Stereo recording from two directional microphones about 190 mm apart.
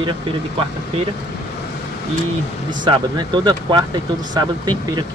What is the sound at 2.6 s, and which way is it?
Speech, 25° right (ahead or behind).